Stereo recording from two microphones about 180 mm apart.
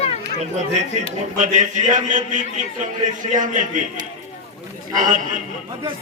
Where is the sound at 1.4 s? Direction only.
45° right (ahead or behind).